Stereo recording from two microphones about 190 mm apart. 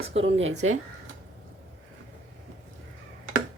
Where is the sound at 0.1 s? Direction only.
85° right.